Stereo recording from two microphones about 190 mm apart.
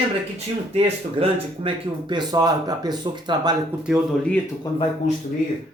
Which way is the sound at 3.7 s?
10° right (ahead or behind).